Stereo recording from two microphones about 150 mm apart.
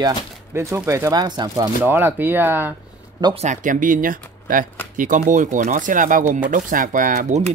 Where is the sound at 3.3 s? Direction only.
60° right (ahead or behind).